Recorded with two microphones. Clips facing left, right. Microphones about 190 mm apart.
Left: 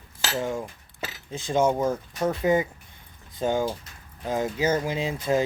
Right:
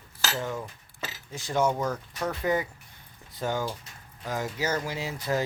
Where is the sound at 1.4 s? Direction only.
20° left (ahead or behind).